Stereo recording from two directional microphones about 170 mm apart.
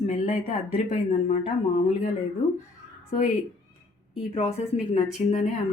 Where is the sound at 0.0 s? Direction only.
45° left (ahead or behind).